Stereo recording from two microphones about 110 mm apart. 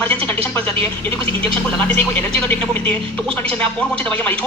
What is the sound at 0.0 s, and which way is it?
Speech, 15° left (ahead or behind).